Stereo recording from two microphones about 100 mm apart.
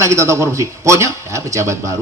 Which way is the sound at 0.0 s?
30° right (ahead or behind).